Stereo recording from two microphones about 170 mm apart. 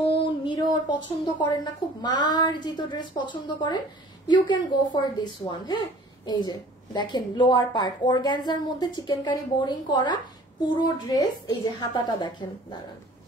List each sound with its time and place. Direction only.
0.0 s a woman's voice: 30° left (ahead or behind)